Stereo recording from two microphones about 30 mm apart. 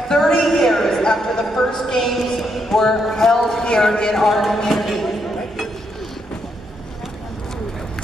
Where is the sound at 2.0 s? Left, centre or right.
Centre.